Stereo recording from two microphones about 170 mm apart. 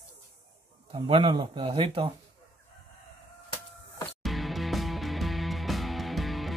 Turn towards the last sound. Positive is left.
turn(degrees=0)  # may be behind; listen again after turning